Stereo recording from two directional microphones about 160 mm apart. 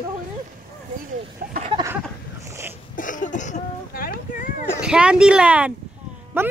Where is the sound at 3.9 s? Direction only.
65° left (ahead or behind).